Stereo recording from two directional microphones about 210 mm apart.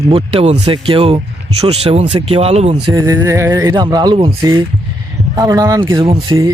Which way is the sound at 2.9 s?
15° right (ahead or behind).